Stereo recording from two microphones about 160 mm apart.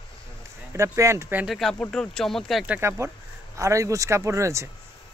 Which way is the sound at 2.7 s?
15° right (ahead or behind).